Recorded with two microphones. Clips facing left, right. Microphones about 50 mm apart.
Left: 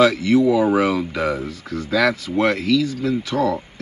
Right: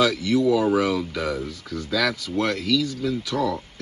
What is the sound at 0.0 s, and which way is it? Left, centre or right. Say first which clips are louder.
Speech: left 5 dB; left.